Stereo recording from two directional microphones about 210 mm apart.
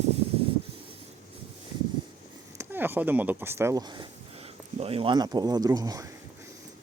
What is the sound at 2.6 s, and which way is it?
Speech, 10° right (ahead or behind).